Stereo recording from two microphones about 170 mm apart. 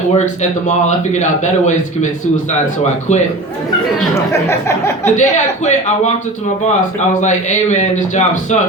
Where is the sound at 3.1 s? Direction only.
45° left (ahead or behind).